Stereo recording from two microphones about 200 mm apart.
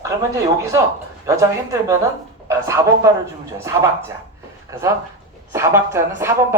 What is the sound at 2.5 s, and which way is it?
Speech, 15° right (ahead or behind).